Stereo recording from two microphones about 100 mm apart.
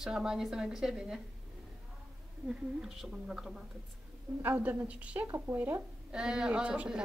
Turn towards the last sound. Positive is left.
turn(degrees=-10)  # may be behind; listen again after turning